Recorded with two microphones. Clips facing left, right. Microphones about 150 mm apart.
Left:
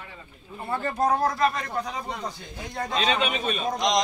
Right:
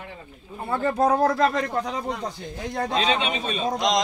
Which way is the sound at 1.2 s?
90° right.